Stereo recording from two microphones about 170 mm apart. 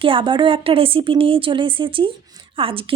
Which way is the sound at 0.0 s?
30° right (ahead or behind).